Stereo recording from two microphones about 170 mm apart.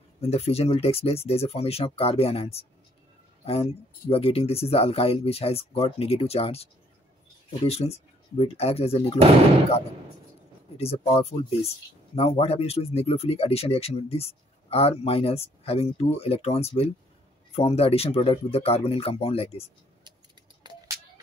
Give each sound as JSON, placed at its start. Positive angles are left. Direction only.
{"t": 0.2, "sound": "speech", "side_deg": 40}
{"t": 10.8, "sound": "speech", "side_deg": 35}
{"t": 20.6, "sound": "a sound", "side_deg": -25}